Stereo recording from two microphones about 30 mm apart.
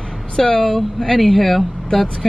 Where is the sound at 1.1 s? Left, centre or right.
Centre.